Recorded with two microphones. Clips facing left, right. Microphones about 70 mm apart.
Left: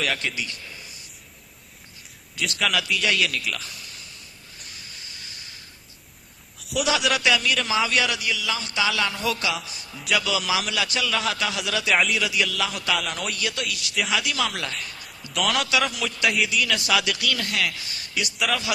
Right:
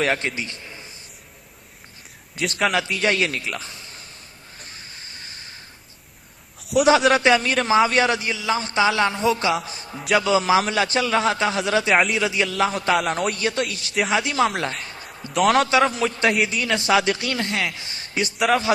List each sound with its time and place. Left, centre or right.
0.0 s a man's voice: right
2.5 s speech: right
2.7 s a man's voice: right
4.6 s hiss: right
6.8 s a man's voice: right
9.6 s a sound: right
10.1 s a man's voice: right
14.6 s a sound: right
15.4 s a man's voice: right
18.3 s speech: right